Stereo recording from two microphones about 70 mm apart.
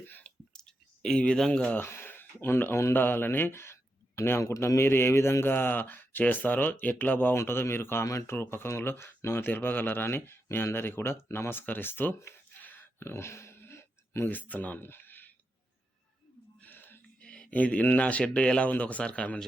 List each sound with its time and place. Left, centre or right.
0.0 s whispering: left
1.0 s speech: centre
1.8 s a man's voice: left
16.6 s a sound: left
17.2 s a sound: centre
17.5 s speech: left